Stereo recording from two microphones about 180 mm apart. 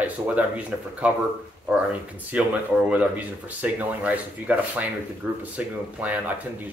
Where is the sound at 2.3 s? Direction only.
5° right (ahead or behind).